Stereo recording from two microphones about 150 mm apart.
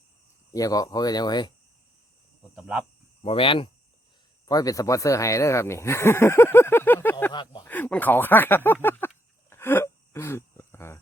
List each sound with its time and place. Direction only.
0.5 s speech: 25° left (ahead or behind)
2.4 s cricket: 5° right (ahead or behind)
3.2 s speech: 35° left (ahead or behind)
4.4 s speech: 25° left (ahead or behind)
7.3 s speech: 25° left (ahead or behind)
7.7 s a sound: 10° left (ahead or behind)